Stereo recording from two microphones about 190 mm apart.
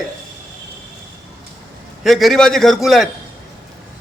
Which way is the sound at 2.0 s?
Centre (ahead or behind).